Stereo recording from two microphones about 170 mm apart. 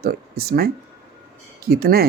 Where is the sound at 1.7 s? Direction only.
65° right (ahead or behind).